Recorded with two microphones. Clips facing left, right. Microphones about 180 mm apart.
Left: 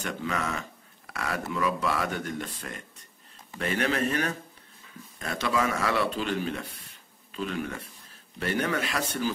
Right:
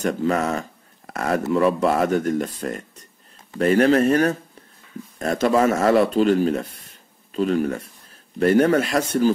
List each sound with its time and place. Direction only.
0.0 s speech: 40° right (ahead or behind)